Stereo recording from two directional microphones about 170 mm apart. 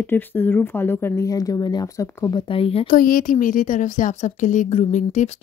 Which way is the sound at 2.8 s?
55° left (ahead or behind).